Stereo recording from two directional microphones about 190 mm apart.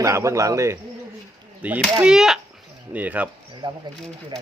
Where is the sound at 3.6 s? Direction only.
25° right (ahead or behind).